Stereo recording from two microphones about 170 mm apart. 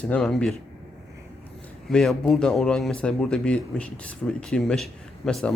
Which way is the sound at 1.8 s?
5° left (ahead or behind).